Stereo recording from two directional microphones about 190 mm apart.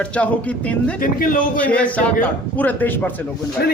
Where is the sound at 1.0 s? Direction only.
50° left (ahead or behind).